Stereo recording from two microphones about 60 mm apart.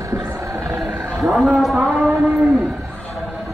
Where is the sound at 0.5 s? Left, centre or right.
Right.